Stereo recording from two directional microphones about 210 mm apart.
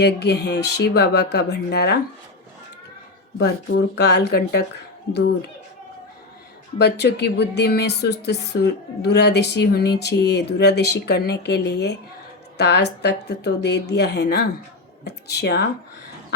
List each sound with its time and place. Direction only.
0.0 s a woman's voice: 50° left (ahead or behind)
3.3 s a woman's voice: 50° left (ahead or behind)
6.7 s a woman's voice: 55° left (ahead or behind)